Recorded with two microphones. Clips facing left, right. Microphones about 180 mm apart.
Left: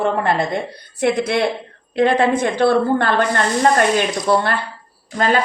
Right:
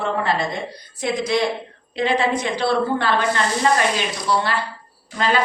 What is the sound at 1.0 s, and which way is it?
A woman's voice, 60° left (ahead or behind).